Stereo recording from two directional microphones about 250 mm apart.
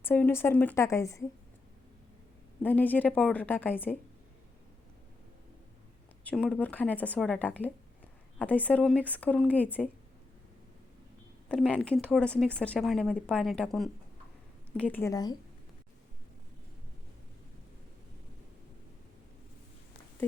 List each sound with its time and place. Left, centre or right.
0.0 s a woman's voice: centre
2.6 s a woman's voice: centre
6.2 s speech: centre
11.4 s a woman's voice: centre